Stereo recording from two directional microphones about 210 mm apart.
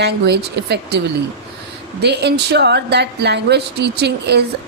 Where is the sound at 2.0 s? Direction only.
50° right (ahead or behind).